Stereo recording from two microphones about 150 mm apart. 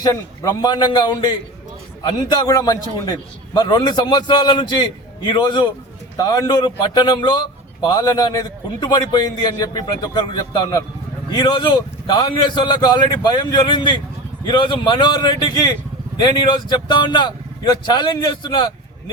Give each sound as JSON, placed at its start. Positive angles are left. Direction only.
{"t": 0.0, "sound": "a man's voice", "side_deg": 25}